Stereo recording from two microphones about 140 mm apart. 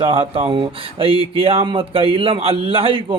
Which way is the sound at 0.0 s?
40° right (ahead or behind).